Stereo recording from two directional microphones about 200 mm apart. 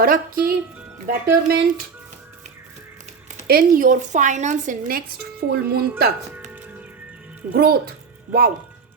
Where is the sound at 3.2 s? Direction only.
45° right (ahead or behind).